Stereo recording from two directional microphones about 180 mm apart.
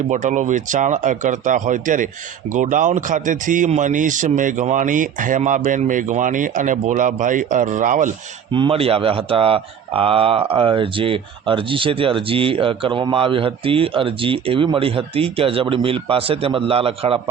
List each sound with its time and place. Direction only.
0.1 s a man's voice: 45° right (ahead or behind)
8.5 s speech: 30° right (ahead or behind)